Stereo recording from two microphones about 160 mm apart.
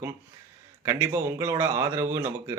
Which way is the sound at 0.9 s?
15° right (ahead or behind).